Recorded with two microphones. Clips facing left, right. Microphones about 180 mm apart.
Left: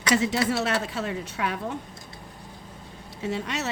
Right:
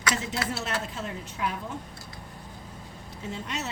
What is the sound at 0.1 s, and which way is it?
A woman's voice, 80° left.